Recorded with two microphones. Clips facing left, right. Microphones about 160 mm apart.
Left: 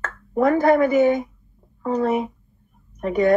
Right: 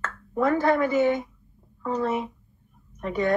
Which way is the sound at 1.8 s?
40° left (ahead or behind).